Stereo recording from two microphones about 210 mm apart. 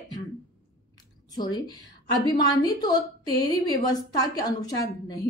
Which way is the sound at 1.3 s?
20° left (ahead or behind).